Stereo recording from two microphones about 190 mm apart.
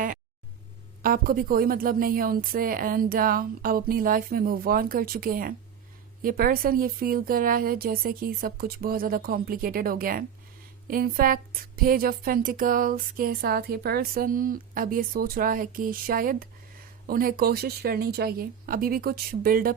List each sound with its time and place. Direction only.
1.0 s speech: 50° right (ahead or behind)